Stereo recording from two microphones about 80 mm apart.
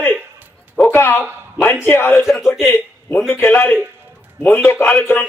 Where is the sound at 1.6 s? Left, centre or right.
Left.